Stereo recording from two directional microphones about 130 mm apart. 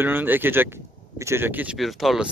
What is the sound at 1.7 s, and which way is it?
Speech, centre (ahead or behind).